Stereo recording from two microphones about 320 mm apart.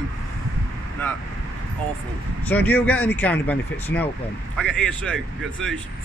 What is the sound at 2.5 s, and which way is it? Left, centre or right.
Speech, centre.